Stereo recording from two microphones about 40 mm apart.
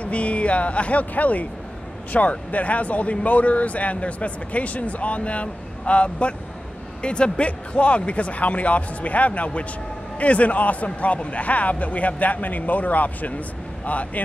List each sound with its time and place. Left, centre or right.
0.0 s speech: left
7.4 s speech: left